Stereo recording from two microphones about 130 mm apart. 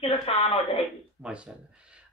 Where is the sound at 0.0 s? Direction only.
45° left (ahead or behind).